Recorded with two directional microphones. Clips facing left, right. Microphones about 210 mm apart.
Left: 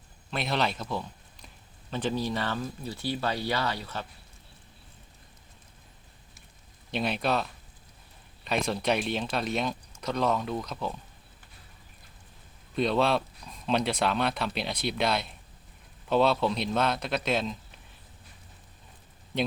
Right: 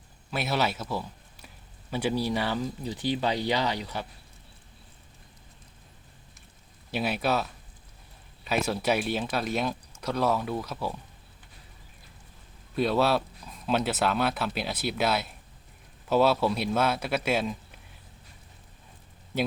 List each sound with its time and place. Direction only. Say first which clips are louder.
0.3 s a man's voice: right 1 dB; 5° right (ahead or behind)
6.9 s speech: right 1 dB; 5° right (ahead or behind)
8.4 s speech: right 1 dB; 5° right (ahead or behind)
12.7 s speech: right 1 dB; 5° right (ahead or behind)
19.3 s speech: right 1 dB; 5° right (ahead or behind)